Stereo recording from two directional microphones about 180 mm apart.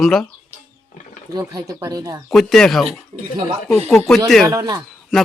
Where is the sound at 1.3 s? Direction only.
20° right (ahead or behind).